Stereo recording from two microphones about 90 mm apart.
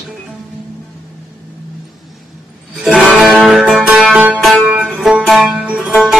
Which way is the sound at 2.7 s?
5° right (ahead or behind).